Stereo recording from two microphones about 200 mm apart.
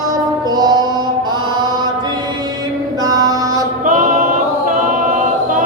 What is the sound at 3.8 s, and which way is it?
Music, 40° right (ahead or behind).